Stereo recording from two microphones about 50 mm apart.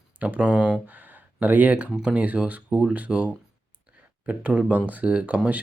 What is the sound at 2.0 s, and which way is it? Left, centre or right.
Speech, right.